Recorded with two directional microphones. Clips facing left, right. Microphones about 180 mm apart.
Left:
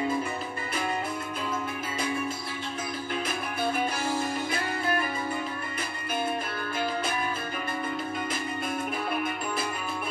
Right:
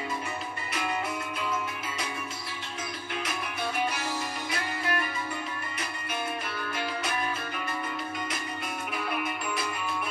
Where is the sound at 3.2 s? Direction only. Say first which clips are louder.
Left 2 dB; 30° left (ahead or behind).